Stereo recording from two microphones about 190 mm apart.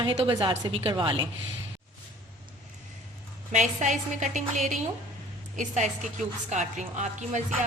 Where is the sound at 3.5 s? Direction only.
40° right (ahead or behind).